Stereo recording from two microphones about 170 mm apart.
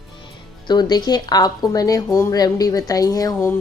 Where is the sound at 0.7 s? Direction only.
25° left (ahead or behind).